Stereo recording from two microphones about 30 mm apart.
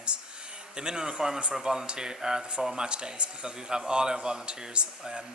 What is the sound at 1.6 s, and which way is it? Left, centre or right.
Speech, right.